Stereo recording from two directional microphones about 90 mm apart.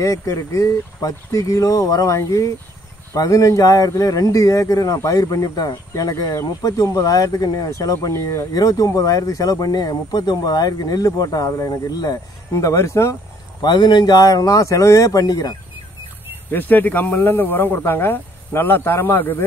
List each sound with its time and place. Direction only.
0.0 s a man's voice: 35° left (ahead or behind)
13.6 s a man's voice: 50° left (ahead or behind)
16.4 s speech: 20° left (ahead or behind)